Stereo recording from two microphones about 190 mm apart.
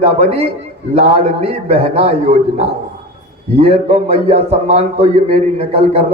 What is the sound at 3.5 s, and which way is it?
A man's voice, 30° right (ahead or behind).